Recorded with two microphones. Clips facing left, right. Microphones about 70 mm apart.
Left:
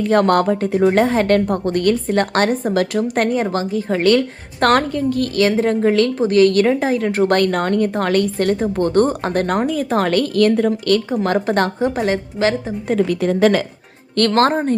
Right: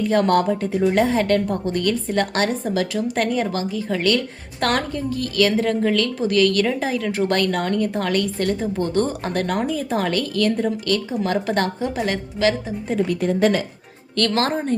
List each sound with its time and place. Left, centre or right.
0.0 s a woman's voice: left
5.3 s a woman's voice: left
11.4 s a woman's voice: left
12.0 s a woman's voice: left
12.9 s a woman's voice: left
14.2 s a woman's voice: left